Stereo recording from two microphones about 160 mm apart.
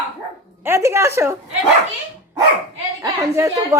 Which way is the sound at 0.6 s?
15° right (ahead or behind).